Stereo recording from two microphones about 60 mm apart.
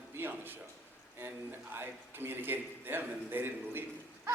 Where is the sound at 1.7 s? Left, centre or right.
Right.